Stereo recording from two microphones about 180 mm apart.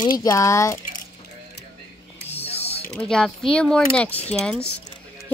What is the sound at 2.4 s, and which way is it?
Mechanisms, 35° left (ahead or behind).